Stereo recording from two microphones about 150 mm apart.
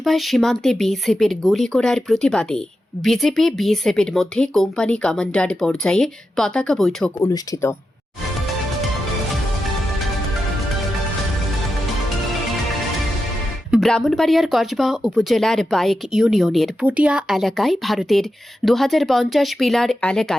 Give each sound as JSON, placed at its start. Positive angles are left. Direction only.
{"t": 0.0, "sound": "speech", "side_deg": 0}
{"t": 7.2, "sound": "speech", "side_deg": 20}
{"t": 13.7, "sound": "speech", "side_deg": 0}